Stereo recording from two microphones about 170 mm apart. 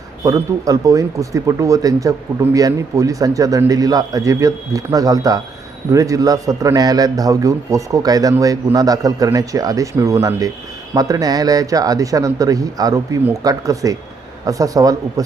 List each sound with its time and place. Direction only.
0.3 s speech: 20° right (ahead or behind)